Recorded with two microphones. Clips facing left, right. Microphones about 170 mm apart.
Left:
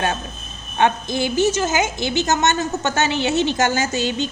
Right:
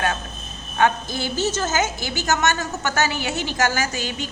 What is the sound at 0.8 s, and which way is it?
A woman's voice, 20° left (ahead or behind).